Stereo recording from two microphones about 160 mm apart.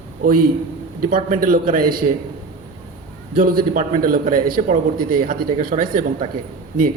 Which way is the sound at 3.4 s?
65° right (ahead or behind).